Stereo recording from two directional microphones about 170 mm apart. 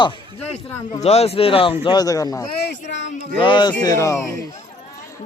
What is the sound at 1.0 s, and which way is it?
Speech, 35° left (ahead or behind).